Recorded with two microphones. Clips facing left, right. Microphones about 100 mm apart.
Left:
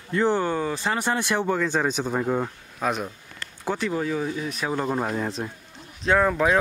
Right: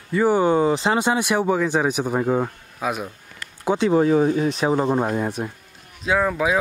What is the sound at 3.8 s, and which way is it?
Speech, 35° right (ahead or behind).